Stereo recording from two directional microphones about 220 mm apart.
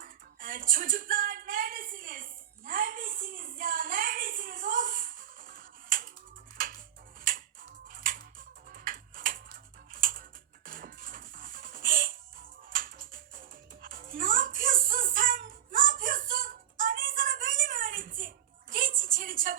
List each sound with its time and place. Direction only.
0.0 s music: 40° right (ahead or behind)
2.6 s a woman's voice: 40° right (ahead or behind)
7.9 s music: 40° right (ahead or behind)
9.9 s a sound: 40° right (ahead or behind)
10.7 s music: 40° right (ahead or behind)